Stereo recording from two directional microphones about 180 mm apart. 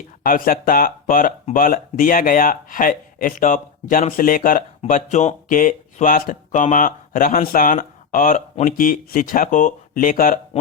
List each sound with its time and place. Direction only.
0.2 s speech: 50° left (ahead or behind)